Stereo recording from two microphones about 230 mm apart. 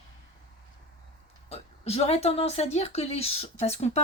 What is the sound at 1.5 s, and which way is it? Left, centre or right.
Speech, left.